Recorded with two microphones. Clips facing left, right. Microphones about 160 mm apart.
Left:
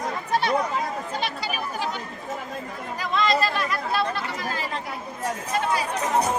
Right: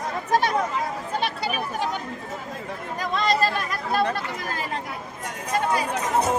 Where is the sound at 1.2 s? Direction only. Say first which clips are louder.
Right 2 dB; 60° right (ahead or behind).